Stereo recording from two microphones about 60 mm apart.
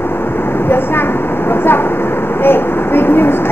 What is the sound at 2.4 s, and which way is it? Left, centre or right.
Vehicle, left.